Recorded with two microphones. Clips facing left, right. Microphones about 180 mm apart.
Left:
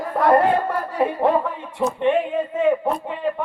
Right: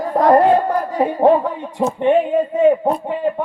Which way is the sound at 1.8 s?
20° right (ahead or behind).